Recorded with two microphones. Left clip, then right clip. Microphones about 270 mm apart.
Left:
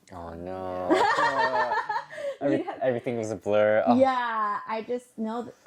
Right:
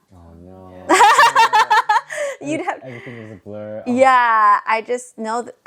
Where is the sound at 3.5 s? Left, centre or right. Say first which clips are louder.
Left 10 dB; centre.